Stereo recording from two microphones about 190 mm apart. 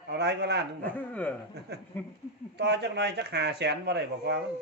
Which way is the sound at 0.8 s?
10° left (ahead or behind).